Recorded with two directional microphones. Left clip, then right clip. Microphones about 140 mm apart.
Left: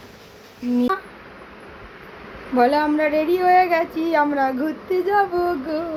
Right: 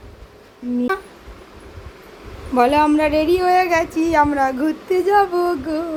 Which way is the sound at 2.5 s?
15° right (ahead or behind).